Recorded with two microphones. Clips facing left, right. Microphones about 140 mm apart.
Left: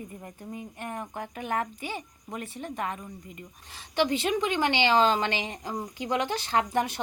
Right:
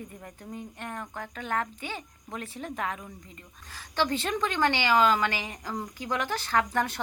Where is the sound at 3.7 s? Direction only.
15° left (ahead or behind).